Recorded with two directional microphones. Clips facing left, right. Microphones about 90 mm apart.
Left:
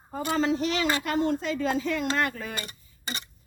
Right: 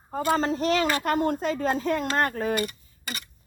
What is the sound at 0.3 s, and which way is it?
Speech, 40° right (ahead or behind).